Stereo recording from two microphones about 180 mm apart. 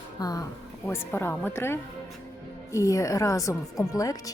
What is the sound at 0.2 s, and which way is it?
A woman's voice, 20° left (ahead or behind).